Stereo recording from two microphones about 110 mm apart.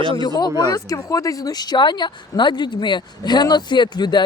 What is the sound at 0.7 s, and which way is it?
Speech, 30° left (ahead or behind).